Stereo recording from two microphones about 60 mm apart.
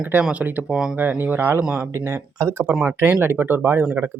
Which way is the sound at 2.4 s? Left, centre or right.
Right.